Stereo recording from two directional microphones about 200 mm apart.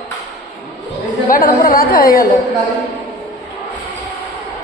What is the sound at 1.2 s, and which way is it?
A woman's voice, 45° left (ahead or behind).